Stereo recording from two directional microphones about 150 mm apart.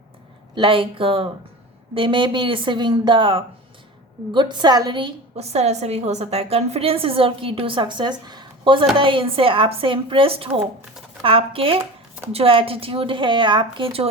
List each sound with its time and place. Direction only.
0.5 s a woman's voice: 35° right (ahead or behind)